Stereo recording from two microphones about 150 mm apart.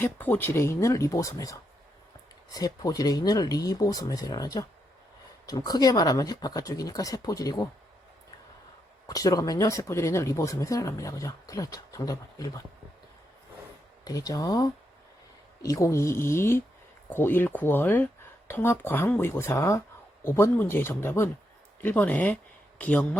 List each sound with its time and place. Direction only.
0.0 s speech: 15° left (ahead or behind)
9.0 s speech: 25° left (ahead or behind)
14.0 s speech: 25° left (ahead or behind)